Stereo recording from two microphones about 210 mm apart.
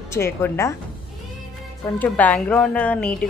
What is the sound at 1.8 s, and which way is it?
A woman's voice, 10° left (ahead or behind).